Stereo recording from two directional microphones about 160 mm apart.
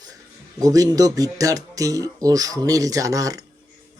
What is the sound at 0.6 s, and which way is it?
Speech, 20° right (ahead or behind).